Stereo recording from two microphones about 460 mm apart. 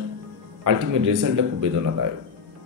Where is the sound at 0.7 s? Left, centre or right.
Right.